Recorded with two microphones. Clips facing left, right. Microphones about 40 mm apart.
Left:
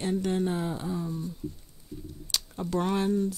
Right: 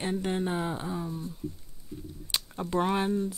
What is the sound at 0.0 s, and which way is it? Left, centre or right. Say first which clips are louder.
Speech: left 2 dB; right.